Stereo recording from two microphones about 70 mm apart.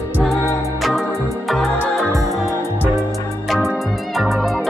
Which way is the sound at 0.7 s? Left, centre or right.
Centre.